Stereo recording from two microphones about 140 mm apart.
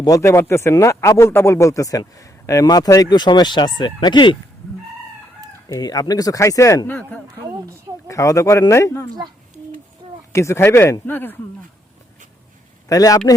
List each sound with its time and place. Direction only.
0.0 s speech: 25° left (ahead or behind)
5.6 s speech: 30° left (ahead or behind)
10.3 s speech: 20° left (ahead or behind)
12.9 s speech: 25° left (ahead or behind)